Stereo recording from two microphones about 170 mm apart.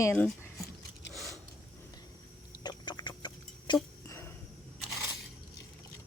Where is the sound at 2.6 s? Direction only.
25° left (ahead or behind).